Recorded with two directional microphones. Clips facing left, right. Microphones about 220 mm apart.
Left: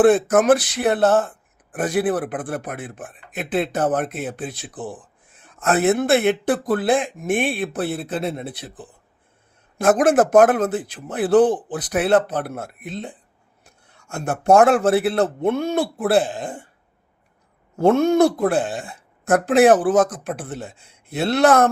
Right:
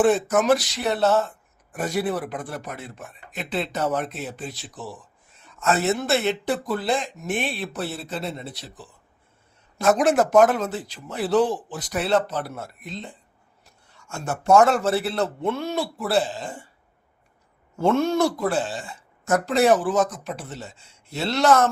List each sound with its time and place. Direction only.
0.0 s speech: 50° left (ahead or behind)
17.7 s speech: 55° left (ahead or behind)